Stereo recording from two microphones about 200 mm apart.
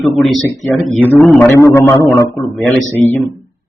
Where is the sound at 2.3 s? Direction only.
Centre (ahead or behind).